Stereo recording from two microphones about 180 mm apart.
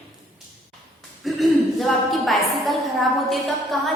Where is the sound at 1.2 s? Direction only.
Centre (ahead or behind).